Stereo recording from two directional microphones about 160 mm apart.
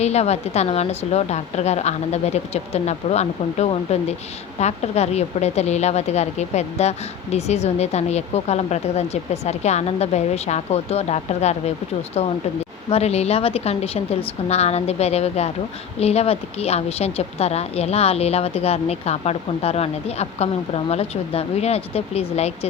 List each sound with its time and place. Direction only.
0.0 s a woman's voice: 45° left (ahead or behind)
12.9 s a woman's voice: 40° left (ahead or behind)